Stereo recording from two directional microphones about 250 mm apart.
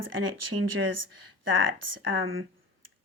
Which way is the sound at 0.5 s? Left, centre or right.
Right.